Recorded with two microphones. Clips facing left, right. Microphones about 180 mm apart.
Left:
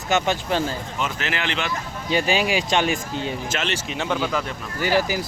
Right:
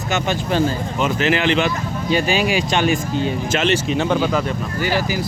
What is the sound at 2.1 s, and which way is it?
Speech, 25° left (ahead or behind).